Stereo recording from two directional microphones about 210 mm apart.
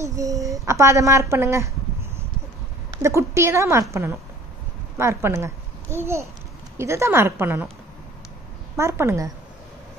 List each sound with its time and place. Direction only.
0.0 s a woman's voice: 15° right (ahead or behind)
8.7 s a woman's voice: 10° right (ahead or behind)